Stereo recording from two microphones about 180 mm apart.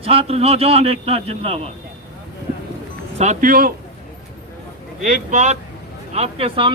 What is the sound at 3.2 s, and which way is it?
Speech, 45° right (ahead or behind).